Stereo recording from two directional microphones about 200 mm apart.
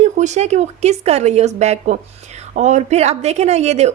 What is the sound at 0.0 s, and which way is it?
Speech, 35° right (ahead or behind).